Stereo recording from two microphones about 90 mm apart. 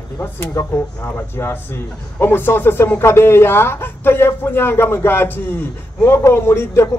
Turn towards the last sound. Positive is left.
turn(degrees=30)  # may be behind; listen again after turning